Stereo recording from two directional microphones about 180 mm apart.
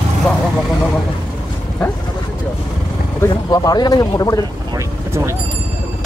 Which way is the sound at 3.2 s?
20° left (ahead or behind).